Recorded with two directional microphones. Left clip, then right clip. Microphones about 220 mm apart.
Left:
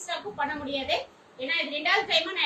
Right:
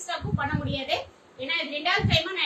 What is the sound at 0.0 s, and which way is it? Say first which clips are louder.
A woman's voice: even; 10° right (ahead or behind).